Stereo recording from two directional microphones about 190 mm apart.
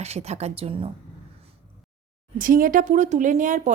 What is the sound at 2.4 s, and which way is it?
Speech, 45° right (ahead or behind).